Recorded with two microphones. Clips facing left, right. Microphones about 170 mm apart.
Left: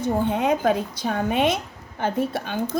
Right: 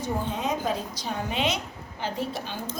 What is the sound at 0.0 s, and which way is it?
A woman's voice, 55° left (ahead or behind).